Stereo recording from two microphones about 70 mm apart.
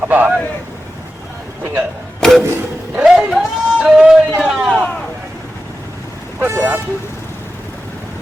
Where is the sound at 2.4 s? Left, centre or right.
Right.